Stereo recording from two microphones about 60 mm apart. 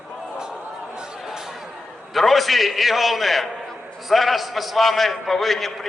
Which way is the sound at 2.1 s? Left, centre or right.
Centre.